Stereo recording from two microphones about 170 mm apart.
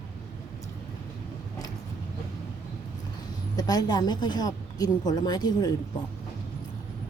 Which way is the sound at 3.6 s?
20° left (ahead or behind).